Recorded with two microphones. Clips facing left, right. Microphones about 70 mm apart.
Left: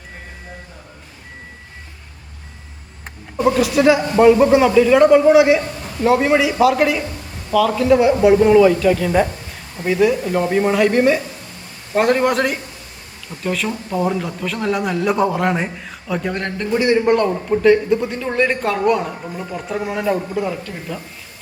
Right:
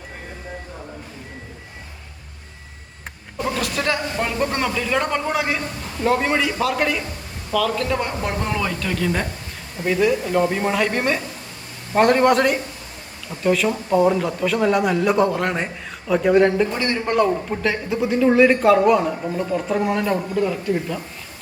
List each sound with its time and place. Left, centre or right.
3.3 s a man's voice: centre
16.7 s a man's voice: centre
17.2 s speech: centre